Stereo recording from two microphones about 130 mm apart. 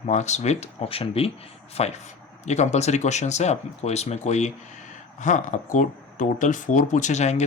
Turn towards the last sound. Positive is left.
turn(degrees=60)  # may be behind; listen again after turning